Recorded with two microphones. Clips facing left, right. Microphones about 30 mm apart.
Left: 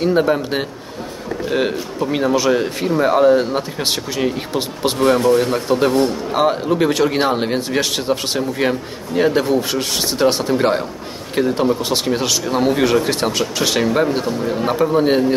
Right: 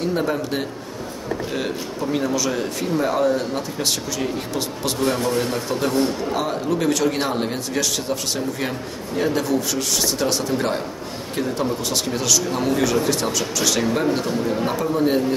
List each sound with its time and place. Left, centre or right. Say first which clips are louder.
0.0 s speech: left 6 dB; left
13.8 s a man's voice: left 4 dB; centre
14.9 s speech: left 3 dB; left